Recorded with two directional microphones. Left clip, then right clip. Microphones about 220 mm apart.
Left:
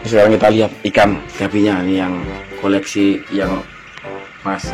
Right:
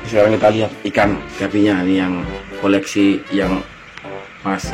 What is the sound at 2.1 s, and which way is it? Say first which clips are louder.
Speech: even; centre (ahead or behind).